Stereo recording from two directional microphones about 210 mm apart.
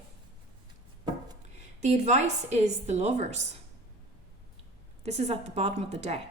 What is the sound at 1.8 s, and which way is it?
A woman's voice, 35° right (ahead or behind).